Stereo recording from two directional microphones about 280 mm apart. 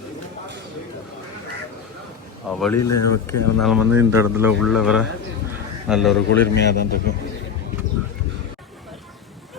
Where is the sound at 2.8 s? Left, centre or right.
Left.